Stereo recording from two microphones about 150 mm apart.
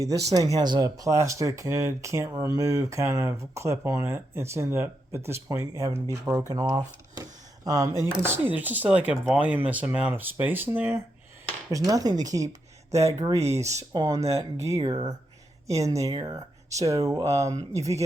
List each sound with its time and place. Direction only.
0.0 s speech: 25° right (ahead or behind)